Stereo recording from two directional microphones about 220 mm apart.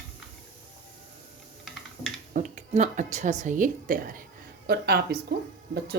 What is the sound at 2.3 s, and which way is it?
A woman's voice, 35° right (ahead or behind).